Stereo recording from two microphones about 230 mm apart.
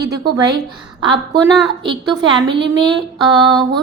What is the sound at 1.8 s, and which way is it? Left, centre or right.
Speech, right.